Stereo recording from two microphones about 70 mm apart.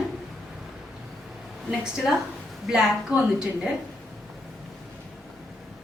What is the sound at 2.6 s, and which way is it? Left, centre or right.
A woman's voice, centre.